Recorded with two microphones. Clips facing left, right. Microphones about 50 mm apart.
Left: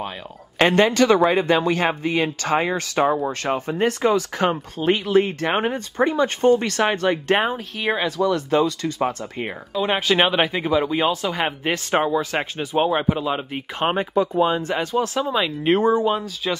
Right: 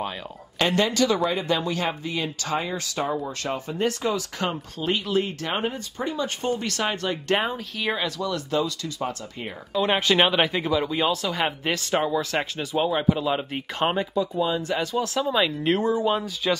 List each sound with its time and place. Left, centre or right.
0.6 s speech: left
7.4 s speech: centre
8.5 s speech: left
9.8 s speech: centre; by 13.2 s left
13.2 s speech: centre
14.4 s speech: left
15.1 s speech: centre
15.6 s speech: left
16.1 s speech: centre